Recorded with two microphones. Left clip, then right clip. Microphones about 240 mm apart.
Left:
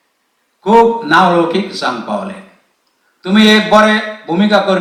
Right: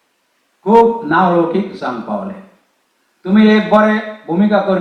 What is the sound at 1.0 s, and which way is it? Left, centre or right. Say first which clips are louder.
A man's voice: left 3 dB; centre.